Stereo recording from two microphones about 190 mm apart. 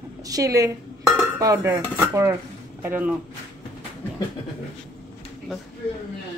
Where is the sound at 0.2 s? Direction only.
20° right (ahead or behind).